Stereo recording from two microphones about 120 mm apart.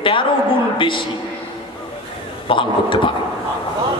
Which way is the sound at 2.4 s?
45° left (ahead or behind).